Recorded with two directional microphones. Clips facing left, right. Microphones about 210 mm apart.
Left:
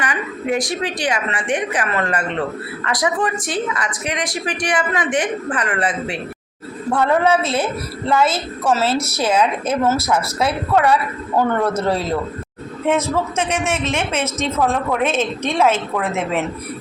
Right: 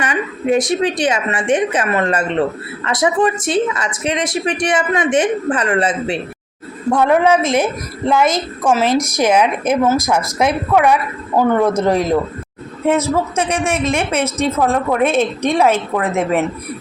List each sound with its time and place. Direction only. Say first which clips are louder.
0.0 s speech: right 4 dB; 25° right (ahead or behind)
6.9 s a woman's voice: right 3 dB; 15° right (ahead or behind)